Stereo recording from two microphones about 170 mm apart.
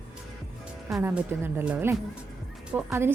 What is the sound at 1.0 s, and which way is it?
Speech, 10° right (ahead or behind).